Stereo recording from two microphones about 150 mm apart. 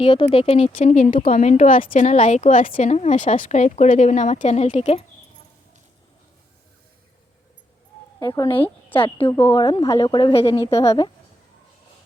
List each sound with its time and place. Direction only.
0.0 s a woman's voice: 40° left (ahead or behind)
0.8 s a woman's voice: 55° left (ahead or behind)
8.2 s a woman's voice: 30° left (ahead or behind)
9.3 s speech: 20° left (ahead or behind)
9.6 s a woman's voice: 30° left (ahead or behind)